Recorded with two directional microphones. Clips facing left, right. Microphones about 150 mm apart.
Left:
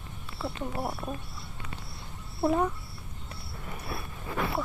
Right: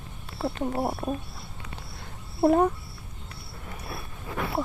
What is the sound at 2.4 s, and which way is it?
Speech, 45° right (ahead or behind).